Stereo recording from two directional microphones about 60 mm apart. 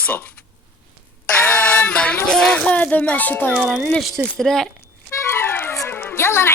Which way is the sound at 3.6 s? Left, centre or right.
Centre.